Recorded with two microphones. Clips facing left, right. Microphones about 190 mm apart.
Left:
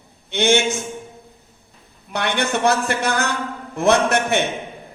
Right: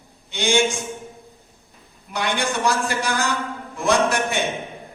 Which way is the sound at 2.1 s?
60° left (ahead or behind).